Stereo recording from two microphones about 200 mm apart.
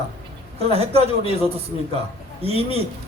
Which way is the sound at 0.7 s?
30° right (ahead or behind).